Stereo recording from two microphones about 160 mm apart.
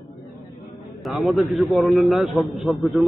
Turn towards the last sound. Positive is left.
turn(degrees=0)  # may be behind; listen again after turning